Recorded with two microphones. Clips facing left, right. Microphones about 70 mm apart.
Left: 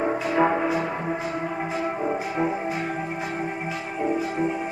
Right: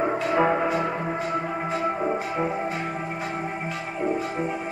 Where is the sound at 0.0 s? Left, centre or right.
Centre.